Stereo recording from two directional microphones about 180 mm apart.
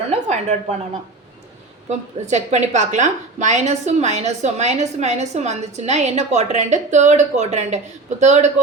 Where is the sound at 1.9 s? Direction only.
40° right (ahead or behind).